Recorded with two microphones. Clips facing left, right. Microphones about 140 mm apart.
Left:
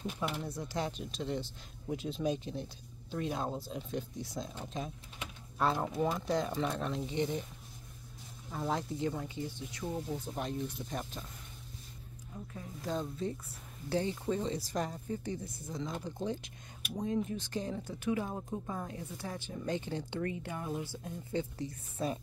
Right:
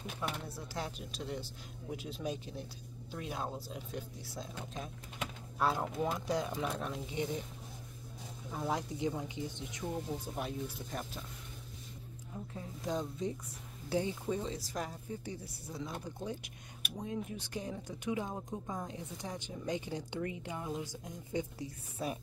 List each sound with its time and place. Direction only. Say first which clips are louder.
0.5 s a woman's voice: left 5 dB; 5° right (ahead or behind)
8.5 s a woman's voice: left 1 dB; 10° right (ahead or behind)
10.3 s speech: left 2 dB; centre (ahead or behind)
12.5 s a woman's voice: even; 20° right (ahead or behind)